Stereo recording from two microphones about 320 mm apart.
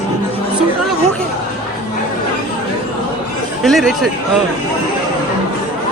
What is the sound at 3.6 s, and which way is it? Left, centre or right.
Speech, centre.